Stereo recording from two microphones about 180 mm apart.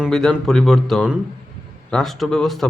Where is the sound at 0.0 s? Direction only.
Centre (ahead or behind).